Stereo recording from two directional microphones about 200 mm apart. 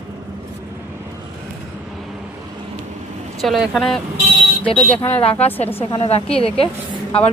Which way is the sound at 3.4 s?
Centre (ahead or behind).